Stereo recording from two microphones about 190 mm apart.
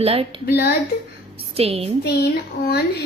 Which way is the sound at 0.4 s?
55° left (ahead or behind).